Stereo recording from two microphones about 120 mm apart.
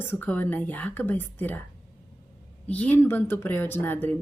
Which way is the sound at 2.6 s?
10° left (ahead or behind).